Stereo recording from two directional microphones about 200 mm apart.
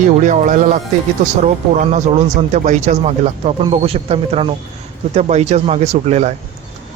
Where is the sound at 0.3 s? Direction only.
35° right (ahead or behind).